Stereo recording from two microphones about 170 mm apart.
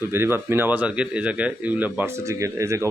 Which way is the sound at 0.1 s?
15° right (ahead or behind).